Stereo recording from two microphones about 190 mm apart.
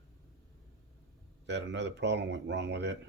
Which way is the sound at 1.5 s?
65° right (ahead or behind).